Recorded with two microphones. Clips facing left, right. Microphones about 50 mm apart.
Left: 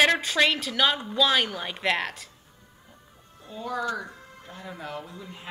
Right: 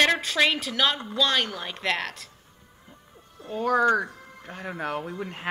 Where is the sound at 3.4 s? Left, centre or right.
Right.